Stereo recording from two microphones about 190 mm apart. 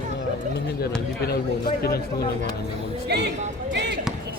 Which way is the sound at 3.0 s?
60° right (ahead or behind).